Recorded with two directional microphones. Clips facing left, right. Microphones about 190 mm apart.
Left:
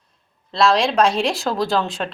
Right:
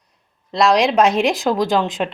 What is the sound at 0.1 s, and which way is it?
Speech, 15° right (ahead or behind).